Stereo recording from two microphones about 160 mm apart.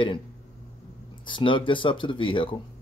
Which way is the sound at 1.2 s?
30° left (ahead or behind).